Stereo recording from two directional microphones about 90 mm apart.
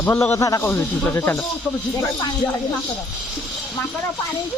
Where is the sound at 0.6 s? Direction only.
20° left (ahead or behind).